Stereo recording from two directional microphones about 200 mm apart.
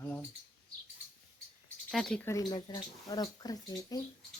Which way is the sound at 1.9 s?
Centre (ahead or behind).